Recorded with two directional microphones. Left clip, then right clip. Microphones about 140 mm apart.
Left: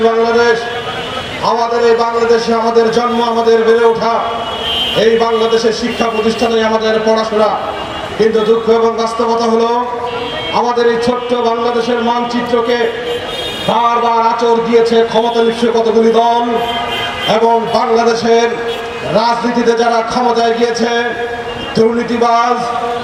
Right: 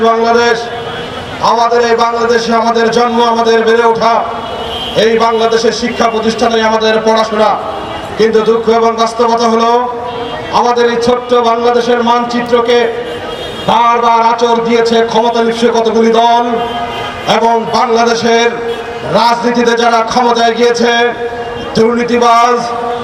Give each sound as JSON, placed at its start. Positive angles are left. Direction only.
{"t": 0.0, "sound": "a man's voice", "side_deg": -25}